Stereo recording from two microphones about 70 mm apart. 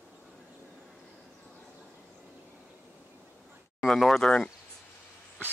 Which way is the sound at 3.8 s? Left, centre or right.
Centre.